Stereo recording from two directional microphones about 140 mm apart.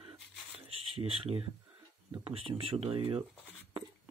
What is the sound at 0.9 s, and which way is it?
Speech, 45° right (ahead or behind).